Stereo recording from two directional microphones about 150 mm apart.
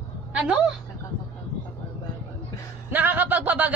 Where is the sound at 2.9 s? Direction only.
10° right (ahead or behind).